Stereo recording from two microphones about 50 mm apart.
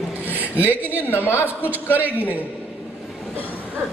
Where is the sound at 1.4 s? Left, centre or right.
Right.